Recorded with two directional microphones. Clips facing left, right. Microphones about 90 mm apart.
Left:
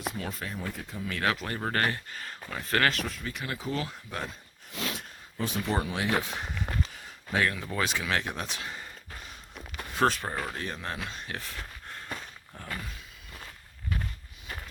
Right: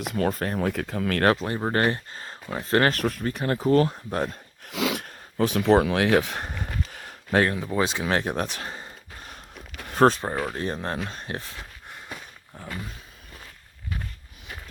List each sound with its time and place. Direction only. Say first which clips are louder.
0.0 s speech: right 9 dB; 65° right (ahead or behind)
1.4 s speech: right 5 dB; 20° right (ahead or behind)
2.9 s speech: right 8 dB; 50° right (ahead or behind)
4.6 s a sound: right 9 dB; 90° right
5.0 s speech: right 9 dB; 70° right (ahead or behind)
6.3 s a sound: right 2 dB; 55° right (ahead or behind)
7.6 s speech: right 6 dB; 20° right (ahead or behind); by 8.7 s 50° right (ahead or behind)
9.9 s speech: right 7 dB; 40° right (ahead or behind)
11.5 s a sound: even; 10° right (ahead or behind)